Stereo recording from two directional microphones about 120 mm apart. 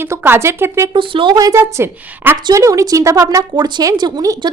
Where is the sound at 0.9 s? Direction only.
45° right (ahead or behind).